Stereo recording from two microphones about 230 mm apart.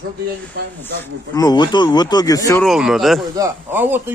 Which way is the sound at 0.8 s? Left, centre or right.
Centre.